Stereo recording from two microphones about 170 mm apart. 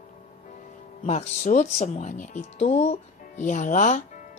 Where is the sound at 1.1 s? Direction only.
45° left (ahead or behind).